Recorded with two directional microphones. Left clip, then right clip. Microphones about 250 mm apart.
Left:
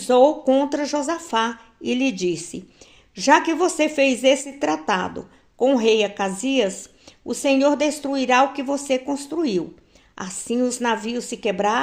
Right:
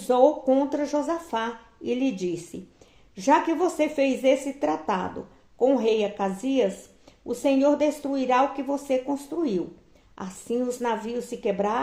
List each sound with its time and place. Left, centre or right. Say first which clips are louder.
0.1 s a woman's voice: left 4 dB; left